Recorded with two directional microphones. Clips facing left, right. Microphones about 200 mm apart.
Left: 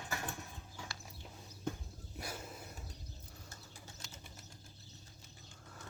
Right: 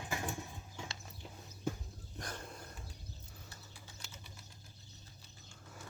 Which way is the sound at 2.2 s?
5° left (ahead or behind).